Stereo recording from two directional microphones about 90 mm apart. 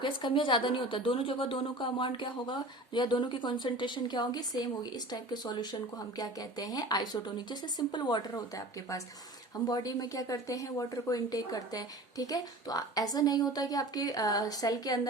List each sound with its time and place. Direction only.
0.0 s a woman's voice: 65° left (ahead or behind); by 15.0 s 45° left (ahead or behind)